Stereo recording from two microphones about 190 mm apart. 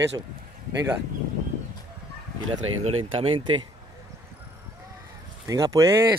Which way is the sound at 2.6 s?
90° right.